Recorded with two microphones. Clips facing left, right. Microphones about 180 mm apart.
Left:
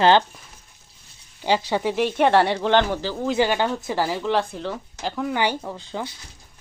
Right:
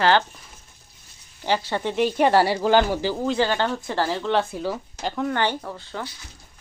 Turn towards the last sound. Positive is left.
turn(degrees=15)  # may be behind; listen again after turning